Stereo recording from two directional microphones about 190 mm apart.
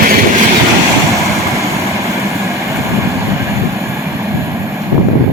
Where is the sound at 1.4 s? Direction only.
15° right (ahead or behind).